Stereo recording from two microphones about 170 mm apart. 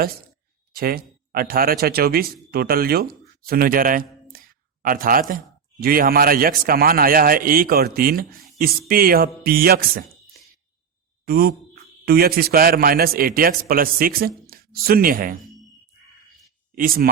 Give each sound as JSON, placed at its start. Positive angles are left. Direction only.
{"t": 0.8, "sound": "speech", "side_deg": -60}
{"t": 11.3, "sound": "speech", "side_deg": -65}
{"t": 16.7, "sound": "speech", "side_deg": -55}